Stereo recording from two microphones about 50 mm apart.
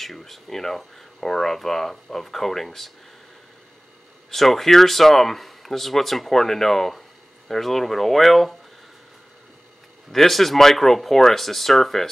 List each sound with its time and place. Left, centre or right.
0.0 s speech: centre
4.3 s speech: centre
10.1 s speech: centre